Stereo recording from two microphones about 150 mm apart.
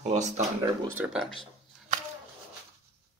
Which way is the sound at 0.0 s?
50° right (ahead or behind).